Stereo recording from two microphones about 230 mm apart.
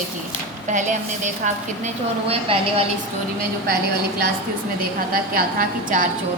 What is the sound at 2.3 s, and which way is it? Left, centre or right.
Speech, right.